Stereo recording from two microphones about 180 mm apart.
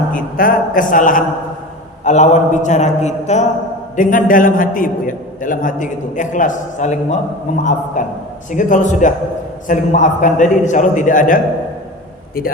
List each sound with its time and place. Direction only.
0.1 s a man's voice: 50° left (ahead or behind)